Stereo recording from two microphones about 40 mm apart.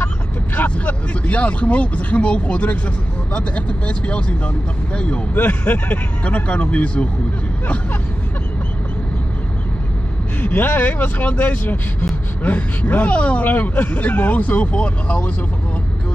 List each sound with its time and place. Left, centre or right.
0.7 s speech: left
5.3 s speech: left
10.4 s speech: left
10.9 s speech: left
13.5 s speech: left